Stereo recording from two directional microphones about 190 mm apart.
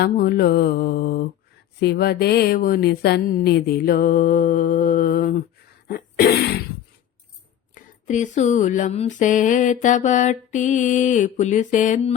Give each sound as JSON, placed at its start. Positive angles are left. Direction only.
{"t": 0.0, "sound": "mantra", "side_deg": 55}
{"t": 1.8, "sound": "speech", "side_deg": 55}
{"t": 5.9, "sound": "a sound", "side_deg": 50}
{"t": 7.8, "sound": "mantra", "side_deg": 40}